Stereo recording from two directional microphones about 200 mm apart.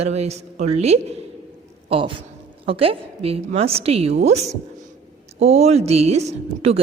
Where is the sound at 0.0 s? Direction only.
30° right (ahead or behind).